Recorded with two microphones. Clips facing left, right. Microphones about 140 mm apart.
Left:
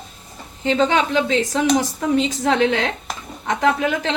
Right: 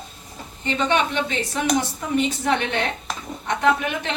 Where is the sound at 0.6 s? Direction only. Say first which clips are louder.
Left 4 dB; 90° left.